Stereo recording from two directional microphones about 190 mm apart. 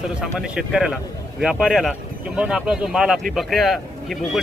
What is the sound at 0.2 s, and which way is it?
Speech, 5° right (ahead or behind).